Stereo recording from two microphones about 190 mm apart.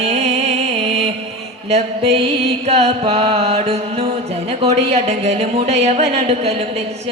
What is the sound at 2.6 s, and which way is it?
Speech, 35° right (ahead or behind).